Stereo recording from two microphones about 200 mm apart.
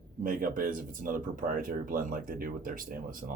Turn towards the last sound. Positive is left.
turn(degrees=-45)  # may be behind; listen again after turning